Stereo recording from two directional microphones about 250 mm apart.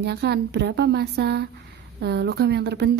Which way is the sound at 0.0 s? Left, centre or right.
Right.